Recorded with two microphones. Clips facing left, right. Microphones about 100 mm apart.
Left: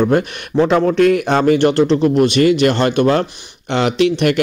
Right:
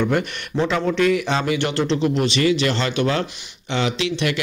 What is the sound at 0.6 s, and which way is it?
Speech, 50° left (ahead or behind).